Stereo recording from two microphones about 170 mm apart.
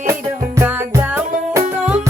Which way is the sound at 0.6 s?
15° right (ahead or behind).